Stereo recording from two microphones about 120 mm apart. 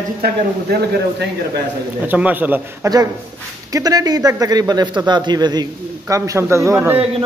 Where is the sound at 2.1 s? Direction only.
15° right (ahead or behind).